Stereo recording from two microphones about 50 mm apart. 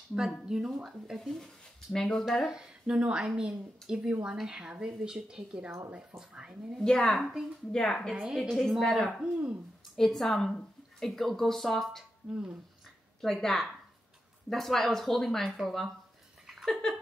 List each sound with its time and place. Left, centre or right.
0.5 s speech: centre
1.9 s speech: centre
2.5 s speech: centre
6.8 s speech: centre
7.7 s speech: centre
8.4 s speech: centre
9.2 s speech: centre
9.9 s speech: centre
12.3 s speech: right
13.2 s speech: centre
16.6 s a sound: centre